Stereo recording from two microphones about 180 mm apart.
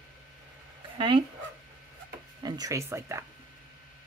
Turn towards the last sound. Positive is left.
turn(degrees=-15)  # may be behind; listen again after turning